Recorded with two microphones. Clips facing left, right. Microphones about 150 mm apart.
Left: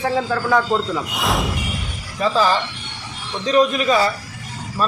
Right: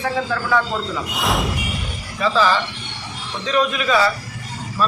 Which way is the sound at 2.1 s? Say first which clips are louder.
Even; 40° left (ahead or behind).